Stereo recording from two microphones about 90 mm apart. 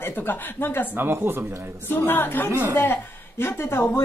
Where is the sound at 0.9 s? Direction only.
25° right (ahead or behind).